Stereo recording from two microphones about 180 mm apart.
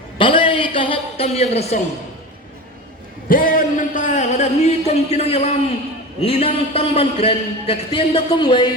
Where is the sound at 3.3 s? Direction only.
50° left (ahead or behind); by 5.5 s 35° left (ahead or behind).